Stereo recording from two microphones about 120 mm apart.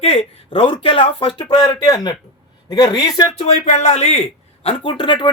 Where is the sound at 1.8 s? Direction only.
35° left (ahead or behind).